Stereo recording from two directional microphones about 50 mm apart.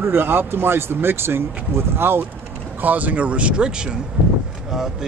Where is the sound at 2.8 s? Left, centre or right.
Right.